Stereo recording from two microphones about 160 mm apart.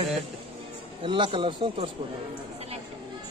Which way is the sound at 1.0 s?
30° right (ahead or behind).